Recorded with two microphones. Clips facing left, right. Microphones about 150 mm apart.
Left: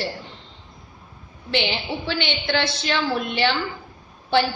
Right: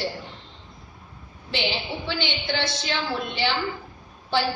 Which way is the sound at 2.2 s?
70° left (ahead or behind).